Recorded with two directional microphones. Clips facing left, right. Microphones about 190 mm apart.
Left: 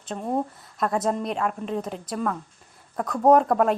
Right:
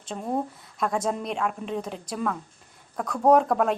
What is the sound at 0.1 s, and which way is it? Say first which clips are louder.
Speech: left 2 dB; centre (ahead or behind).